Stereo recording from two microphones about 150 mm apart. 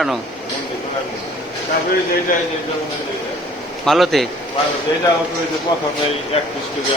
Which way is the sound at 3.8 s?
Centre (ahead or behind).